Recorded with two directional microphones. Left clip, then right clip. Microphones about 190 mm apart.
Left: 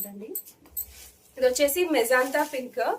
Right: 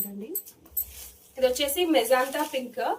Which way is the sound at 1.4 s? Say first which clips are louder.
Left 2 dB; 40° left (ahead or behind).